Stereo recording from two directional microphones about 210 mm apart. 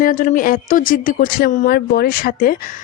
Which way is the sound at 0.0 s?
40° left (ahead or behind).